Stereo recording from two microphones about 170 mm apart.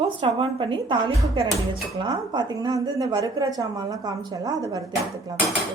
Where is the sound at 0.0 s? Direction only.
30° right (ahead or behind).